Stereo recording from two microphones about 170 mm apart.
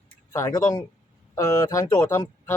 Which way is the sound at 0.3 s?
20° left (ahead or behind).